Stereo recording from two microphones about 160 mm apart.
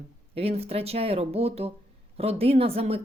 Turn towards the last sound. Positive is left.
turn(degrees=-40)  # may be behind; listen again after turning